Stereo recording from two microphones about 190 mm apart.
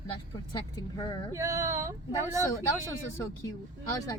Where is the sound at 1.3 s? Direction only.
15° right (ahead or behind).